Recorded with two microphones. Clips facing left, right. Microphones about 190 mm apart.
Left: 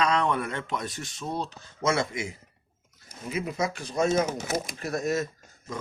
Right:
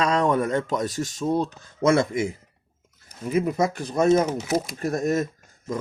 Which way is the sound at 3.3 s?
50° right (ahead or behind).